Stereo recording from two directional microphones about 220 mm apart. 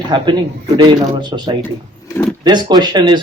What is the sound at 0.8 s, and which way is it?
Speech, 20° right (ahead or behind).